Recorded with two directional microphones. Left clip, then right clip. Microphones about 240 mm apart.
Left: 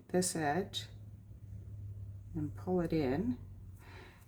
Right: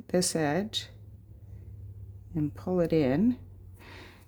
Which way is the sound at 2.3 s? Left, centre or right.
Right.